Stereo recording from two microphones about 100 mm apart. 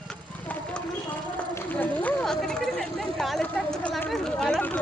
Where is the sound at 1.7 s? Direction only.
15° left (ahead or behind).